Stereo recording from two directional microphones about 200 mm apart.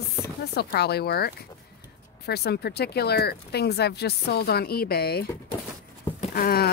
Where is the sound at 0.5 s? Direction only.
55° left (ahead or behind).